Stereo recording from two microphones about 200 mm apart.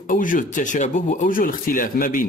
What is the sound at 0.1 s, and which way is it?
Speech, 40° left (ahead or behind).